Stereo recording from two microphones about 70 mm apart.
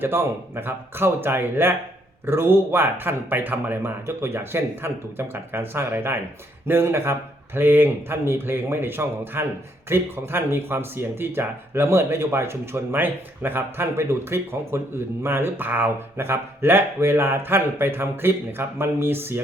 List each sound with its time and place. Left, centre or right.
0.0 s speech: right